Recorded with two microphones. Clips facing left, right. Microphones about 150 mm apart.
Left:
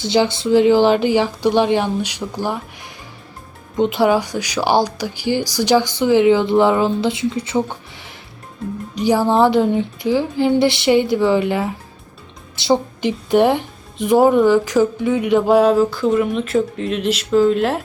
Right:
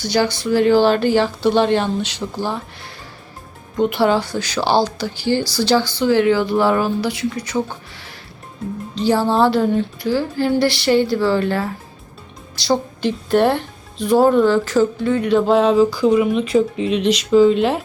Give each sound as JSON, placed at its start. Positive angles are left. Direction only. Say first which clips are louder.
{"t": 0.0, "sound": "speech", "louder": "left 2 dB", "side_deg": 20}